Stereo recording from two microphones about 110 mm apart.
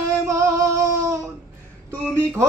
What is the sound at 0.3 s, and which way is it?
Music, 25° right (ahead or behind).